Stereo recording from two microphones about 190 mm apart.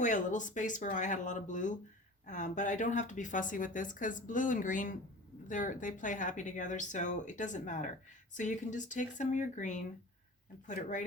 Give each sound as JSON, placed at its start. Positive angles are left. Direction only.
{"t": 0.0, "sound": "speech", "side_deg": 40}